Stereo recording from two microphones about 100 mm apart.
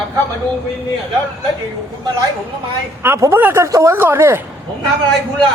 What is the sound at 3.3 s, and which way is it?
Speech, 25° right (ahead or behind).